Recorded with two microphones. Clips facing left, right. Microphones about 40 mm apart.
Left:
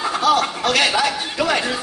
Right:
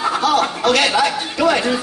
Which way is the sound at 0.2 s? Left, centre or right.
Centre.